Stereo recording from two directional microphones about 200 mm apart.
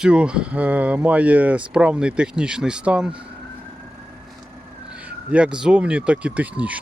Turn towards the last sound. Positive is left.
turn(degrees=-5)  # may be behind; listen again after turning